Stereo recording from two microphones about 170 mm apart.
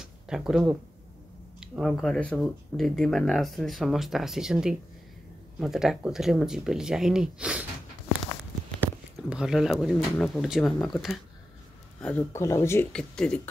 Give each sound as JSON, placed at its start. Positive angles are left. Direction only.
{"t": 0.0, "sound": "a sound", "side_deg": -5}
{"t": 1.6, "sound": "speech", "side_deg": 0}
{"t": 9.3, "sound": "speech", "side_deg": -5}
{"t": 12.9, "sound": "speech", "side_deg": 5}